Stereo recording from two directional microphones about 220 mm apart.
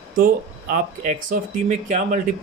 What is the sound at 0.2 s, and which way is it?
Speech, 40° right (ahead or behind).